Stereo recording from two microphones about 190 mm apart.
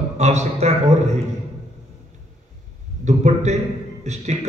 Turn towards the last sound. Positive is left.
turn(degrees=-35)  # may be behind; listen again after turning